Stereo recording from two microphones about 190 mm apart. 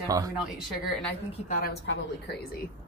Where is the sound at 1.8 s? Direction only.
70° left (ahead or behind).